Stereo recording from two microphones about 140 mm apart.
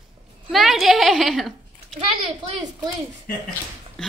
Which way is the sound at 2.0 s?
35° right (ahead or behind).